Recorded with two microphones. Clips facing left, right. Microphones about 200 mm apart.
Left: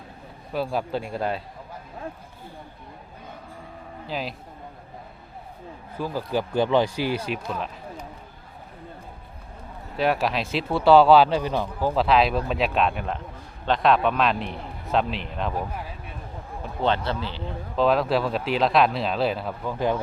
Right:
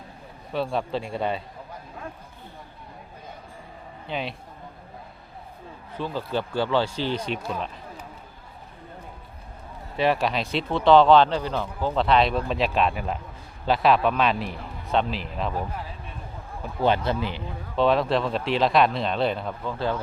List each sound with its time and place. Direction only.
0.5 s speech: 5° left (ahead or behind)
4.0 s speech: centre (ahead or behind)
6.0 s speech: 10° left (ahead or behind)
7.3 s speech: centre (ahead or behind)
10.0 s speech: centre (ahead or behind)
16.8 s speech: 15° right (ahead or behind)
17.7 s speech: centre (ahead or behind)